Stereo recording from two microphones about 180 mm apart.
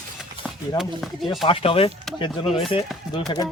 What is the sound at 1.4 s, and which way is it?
Speech, 30° left (ahead or behind).